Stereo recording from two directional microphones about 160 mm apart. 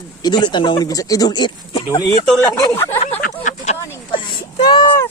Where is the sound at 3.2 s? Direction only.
50° left (ahead or behind).